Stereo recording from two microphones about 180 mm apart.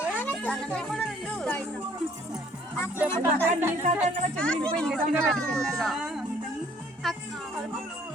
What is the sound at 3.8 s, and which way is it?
Speech, 40° right (ahead or behind).